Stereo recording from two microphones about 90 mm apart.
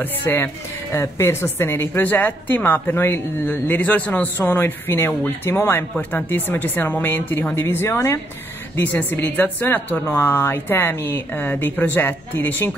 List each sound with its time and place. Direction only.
0.0 s a woman's voice: 20° left (ahead or behind)